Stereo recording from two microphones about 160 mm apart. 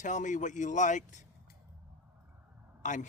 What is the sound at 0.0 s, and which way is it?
A man's voice, 50° left (ahead or behind).